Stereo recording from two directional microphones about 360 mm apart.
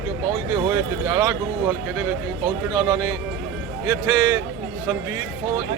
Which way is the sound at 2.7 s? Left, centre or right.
Centre.